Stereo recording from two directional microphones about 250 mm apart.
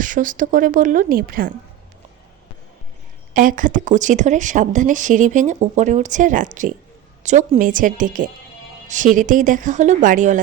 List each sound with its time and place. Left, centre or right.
0.0 s speech: right
3.3 s speech: right